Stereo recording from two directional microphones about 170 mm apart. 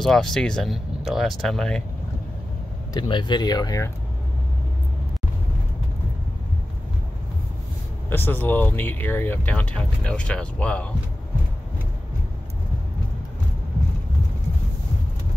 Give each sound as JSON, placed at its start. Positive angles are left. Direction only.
{"t": 0.0, "sound": "speech", "side_deg": 5}
{"t": 2.9, "sound": "speech", "side_deg": 25}
{"t": 8.1, "sound": "speech", "side_deg": 10}